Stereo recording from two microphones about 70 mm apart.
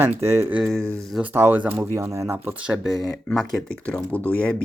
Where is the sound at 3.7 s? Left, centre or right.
Centre.